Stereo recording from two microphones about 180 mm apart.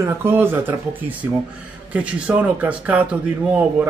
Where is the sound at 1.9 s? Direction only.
5° right (ahead or behind).